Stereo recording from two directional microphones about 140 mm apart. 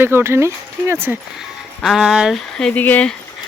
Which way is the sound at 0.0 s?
15° right (ahead or behind).